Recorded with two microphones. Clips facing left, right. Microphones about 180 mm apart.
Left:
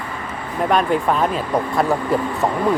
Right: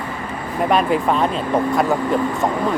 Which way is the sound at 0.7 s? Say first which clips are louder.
Even; centre (ahead or behind).